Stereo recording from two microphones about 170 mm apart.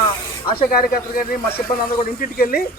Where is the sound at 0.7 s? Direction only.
60° left (ahead or behind).